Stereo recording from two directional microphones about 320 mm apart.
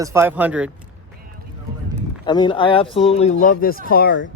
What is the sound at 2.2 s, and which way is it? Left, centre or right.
Speech, centre.